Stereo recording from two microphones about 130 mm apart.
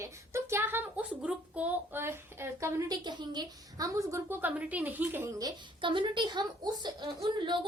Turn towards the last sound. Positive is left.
turn(degrees=-40)  # may be behind; listen again after turning